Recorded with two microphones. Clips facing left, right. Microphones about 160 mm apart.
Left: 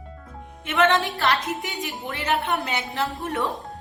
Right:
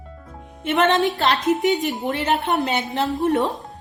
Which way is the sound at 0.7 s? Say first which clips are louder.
Right 3 dB; 25° right (ahead or behind).